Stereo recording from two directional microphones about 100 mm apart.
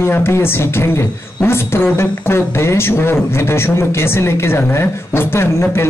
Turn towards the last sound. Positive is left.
turn(degrees=25)  # may be behind; listen again after turning